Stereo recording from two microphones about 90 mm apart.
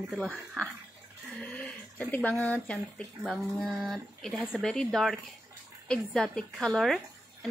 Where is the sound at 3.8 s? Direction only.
Centre (ahead or behind).